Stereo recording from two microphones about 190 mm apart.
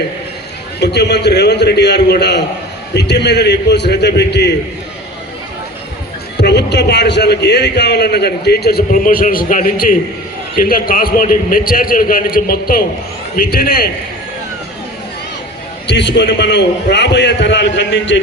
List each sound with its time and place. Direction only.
0.8 s a man's voice: 60° left (ahead or behind)
6.3 s a man's voice: 60° left (ahead or behind)
15.9 s a man's voice: 65° left (ahead or behind)